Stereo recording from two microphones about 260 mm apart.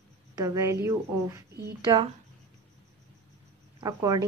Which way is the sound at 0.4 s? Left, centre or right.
Centre.